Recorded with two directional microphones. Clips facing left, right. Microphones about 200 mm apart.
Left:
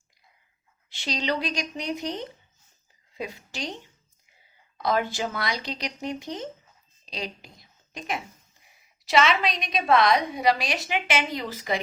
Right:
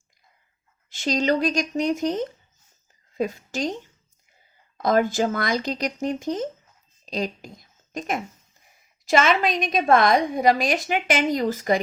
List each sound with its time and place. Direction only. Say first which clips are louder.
0.9 s a woman's voice: right 7 dB; 45° right (ahead or behind)
4.8 s a woman's voice: right 6 dB; 45° right (ahead or behind)